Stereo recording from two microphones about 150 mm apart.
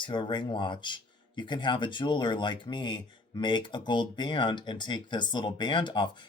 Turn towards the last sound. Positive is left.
turn(degrees=30)  # may be behind; listen again after turning